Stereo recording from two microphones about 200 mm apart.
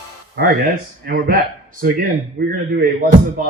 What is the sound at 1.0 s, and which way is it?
Speech, 45° right (ahead or behind).